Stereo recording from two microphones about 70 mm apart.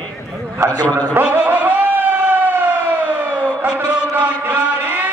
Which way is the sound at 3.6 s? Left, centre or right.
Centre.